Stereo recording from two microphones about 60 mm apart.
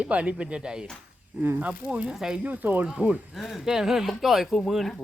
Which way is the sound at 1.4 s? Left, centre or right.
Right.